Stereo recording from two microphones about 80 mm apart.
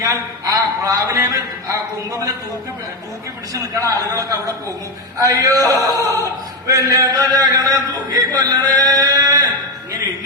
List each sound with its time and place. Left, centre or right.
0.0 s a man's voice: right
3.5 s a man's voice: right